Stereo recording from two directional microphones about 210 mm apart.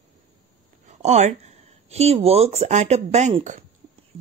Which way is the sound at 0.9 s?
30° right (ahead or behind).